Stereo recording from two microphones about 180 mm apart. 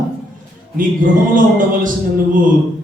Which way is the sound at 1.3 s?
45° right (ahead or behind).